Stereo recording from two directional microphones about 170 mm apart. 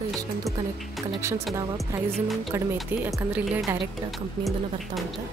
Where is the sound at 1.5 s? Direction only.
20° right (ahead or behind).